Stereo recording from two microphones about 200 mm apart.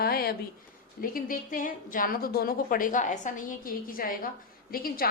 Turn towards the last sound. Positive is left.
turn(degrees=45)  # may be behind; listen again after turning